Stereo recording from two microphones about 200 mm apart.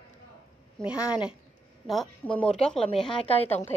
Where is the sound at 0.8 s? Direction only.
5° right (ahead or behind).